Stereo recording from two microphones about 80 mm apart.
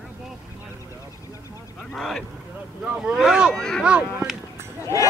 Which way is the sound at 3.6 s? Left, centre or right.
Centre.